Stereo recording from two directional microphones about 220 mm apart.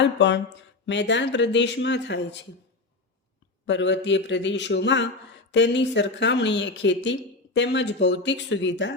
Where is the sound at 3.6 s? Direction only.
55° left (ahead or behind).